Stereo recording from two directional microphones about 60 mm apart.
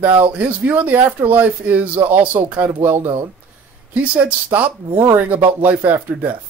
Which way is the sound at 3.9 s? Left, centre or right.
Right.